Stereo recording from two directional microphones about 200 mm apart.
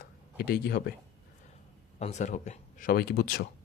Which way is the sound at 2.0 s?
35° left (ahead or behind).